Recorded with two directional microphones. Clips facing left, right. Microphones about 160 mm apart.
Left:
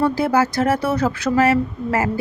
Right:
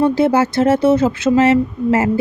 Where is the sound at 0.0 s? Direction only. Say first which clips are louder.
Right 4 dB; 25° right (ahead or behind).